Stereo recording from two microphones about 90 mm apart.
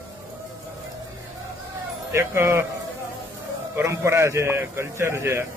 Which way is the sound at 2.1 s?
30° right (ahead or behind).